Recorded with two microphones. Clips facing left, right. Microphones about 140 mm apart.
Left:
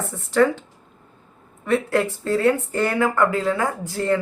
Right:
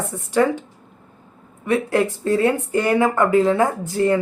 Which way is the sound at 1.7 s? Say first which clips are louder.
Right 1 dB; 15° right (ahead or behind).